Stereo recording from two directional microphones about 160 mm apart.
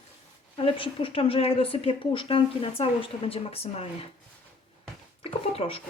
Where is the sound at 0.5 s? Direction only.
35° left (ahead or behind).